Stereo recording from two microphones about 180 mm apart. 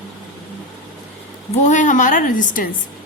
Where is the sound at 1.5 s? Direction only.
45° left (ahead or behind).